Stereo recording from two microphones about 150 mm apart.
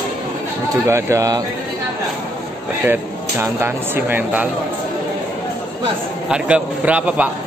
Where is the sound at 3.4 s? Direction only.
15° right (ahead or behind).